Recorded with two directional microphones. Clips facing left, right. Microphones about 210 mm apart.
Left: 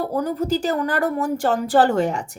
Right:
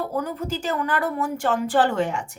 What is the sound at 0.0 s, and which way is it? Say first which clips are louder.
A woman's voice: left 4 dB; 35° left (ahead or behind).